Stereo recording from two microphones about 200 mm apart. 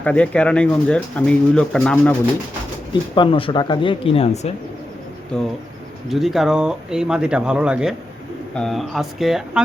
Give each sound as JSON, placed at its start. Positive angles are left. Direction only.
{"t": 0.0, "sound": "speech", "side_deg": 5}
{"t": 2.9, "sound": "speech", "side_deg": 25}
{"t": 5.3, "sound": "speech", "side_deg": 5}